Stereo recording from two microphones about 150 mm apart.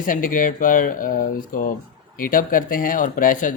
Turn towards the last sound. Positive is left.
turn(degrees=65)  # may be behind; listen again after turning